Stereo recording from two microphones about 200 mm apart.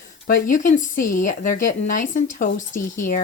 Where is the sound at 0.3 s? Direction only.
40° left (ahead or behind).